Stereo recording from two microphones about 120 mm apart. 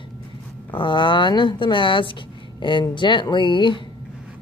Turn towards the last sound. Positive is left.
turn(degrees=40)  # may be behind; listen again after turning